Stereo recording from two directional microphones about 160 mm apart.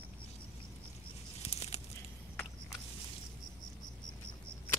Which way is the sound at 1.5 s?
40° left (ahead or behind).